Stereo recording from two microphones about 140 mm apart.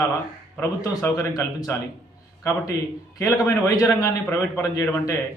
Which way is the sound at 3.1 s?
25° left (ahead or behind).